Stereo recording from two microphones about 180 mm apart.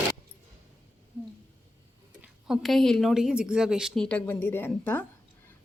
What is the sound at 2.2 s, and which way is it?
A woman's voice, 5° right (ahead or behind).